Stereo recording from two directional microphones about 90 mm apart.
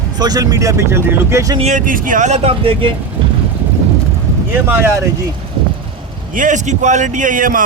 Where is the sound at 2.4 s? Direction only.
90° right.